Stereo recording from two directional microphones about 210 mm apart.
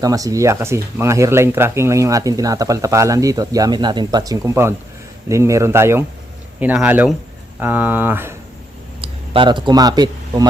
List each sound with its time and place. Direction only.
0.0 s speech: 15° right (ahead or behind)
9.0 s speech: 25° right (ahead or behind)